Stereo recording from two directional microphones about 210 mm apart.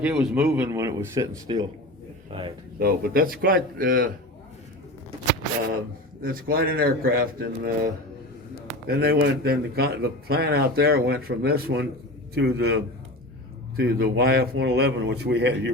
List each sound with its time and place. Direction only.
0.0 s speech: 5° right (ahead or behind); by 2.5 s 20° right (ahead or behind)
2.7 s speech: 45° right (ahead or behind)
6.2 s speech: 45° right (ahead or behind)
8.9 s a man's voice: 45° right (ahead or behind)